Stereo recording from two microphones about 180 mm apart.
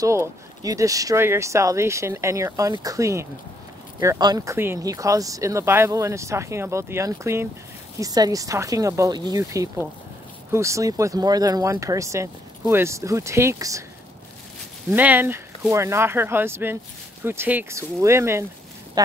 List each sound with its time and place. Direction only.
0.0 s speech: 15° right (ahead or behind)
14.9 s speech: 10° right (ahead or behind)